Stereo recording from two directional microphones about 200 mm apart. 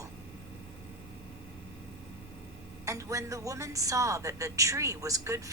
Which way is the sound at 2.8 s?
15° right (ahead or behind).